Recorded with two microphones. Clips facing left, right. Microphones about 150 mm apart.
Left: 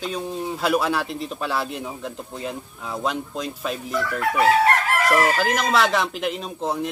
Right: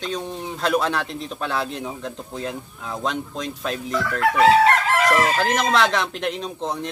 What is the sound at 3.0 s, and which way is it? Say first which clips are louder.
Speech: even; 5° left (ahead or behind).